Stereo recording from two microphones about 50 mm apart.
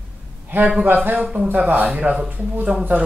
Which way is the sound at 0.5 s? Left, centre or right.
Right.